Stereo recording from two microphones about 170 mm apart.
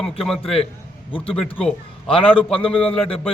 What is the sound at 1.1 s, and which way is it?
A man's voice, 30° left (ahead or behind).